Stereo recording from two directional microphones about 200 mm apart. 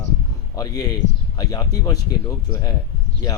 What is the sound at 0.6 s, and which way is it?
Speech, 20° left (ahead or behind).